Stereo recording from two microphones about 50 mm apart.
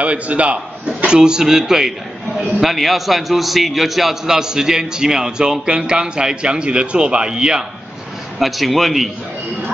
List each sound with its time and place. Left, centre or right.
0.0 s a man's voice: right
8.4 s a man's voice: centre